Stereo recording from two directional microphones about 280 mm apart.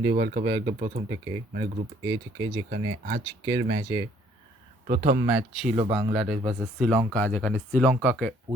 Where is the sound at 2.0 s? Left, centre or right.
Centre.